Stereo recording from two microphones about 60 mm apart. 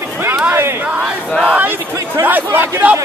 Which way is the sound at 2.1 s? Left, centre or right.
Right.